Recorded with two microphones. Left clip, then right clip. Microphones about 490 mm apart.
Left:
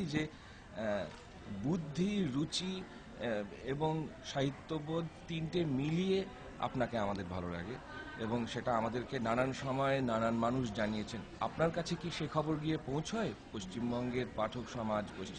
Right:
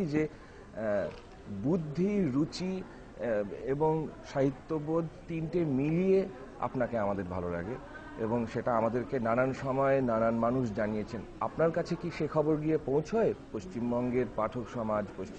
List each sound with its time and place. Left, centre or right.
0.2 s a man's voice: centre